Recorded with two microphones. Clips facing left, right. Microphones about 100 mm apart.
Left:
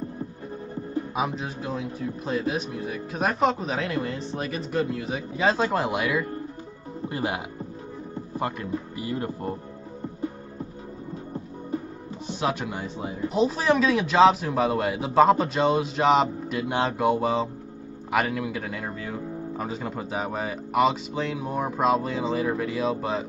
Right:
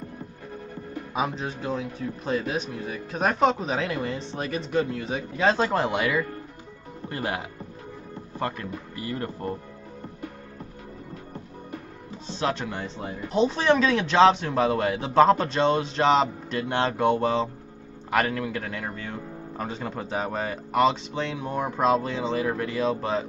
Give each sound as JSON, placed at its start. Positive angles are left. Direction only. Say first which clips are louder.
{"t": 1.1, "sound": "speech", "louder": "right 4 dB", "side_deg": 5}
{"t": 7.1, "sound": "speech", "louder": "left 1 dB", "side_deg": 15}
{"t": 12.3, "sound": "speech", "louder": "even", "side_deg": 10}